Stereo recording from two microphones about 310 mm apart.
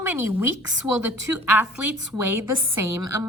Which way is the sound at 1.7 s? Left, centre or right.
Left.